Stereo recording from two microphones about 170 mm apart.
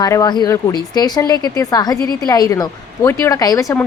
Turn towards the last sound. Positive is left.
turn(degrees=20)  # may be behind; listen again after turning